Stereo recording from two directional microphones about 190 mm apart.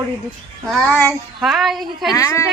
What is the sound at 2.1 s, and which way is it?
Speech, 15° left (ahead or behind).